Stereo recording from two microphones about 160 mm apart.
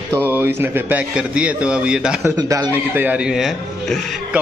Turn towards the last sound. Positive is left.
turn(degrees=0)  # may be behind; listen again after turning